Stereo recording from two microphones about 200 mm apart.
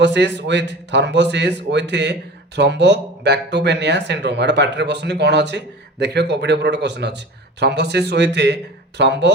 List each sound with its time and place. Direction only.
0.0 s speech: 60° right (ahead or behind)